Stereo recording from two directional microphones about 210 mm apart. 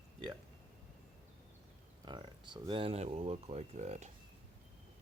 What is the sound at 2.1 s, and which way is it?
Speech, 20° right (ahead or behind).